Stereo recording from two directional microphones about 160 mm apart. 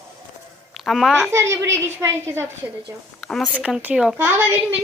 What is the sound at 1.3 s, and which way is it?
A woman's voice, 15° right (ahead or behind).